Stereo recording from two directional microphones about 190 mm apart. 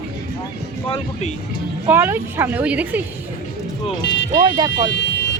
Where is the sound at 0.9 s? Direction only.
35° left (ahead or behind).